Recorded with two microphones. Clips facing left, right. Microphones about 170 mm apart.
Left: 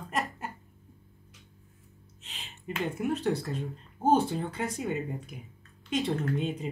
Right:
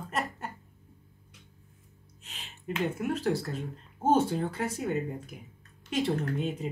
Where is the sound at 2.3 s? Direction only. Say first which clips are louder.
Right 2 dB; centre (ahead or behind).